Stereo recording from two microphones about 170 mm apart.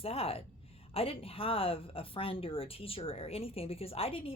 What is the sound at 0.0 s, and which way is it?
Speech, 35° left (ahead or behind).